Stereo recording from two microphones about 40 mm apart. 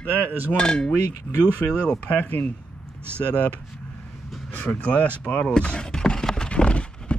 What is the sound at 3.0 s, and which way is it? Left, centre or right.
Speech, right.